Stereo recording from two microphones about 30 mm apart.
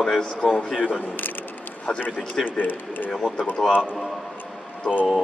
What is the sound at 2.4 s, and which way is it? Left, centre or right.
Speech, left.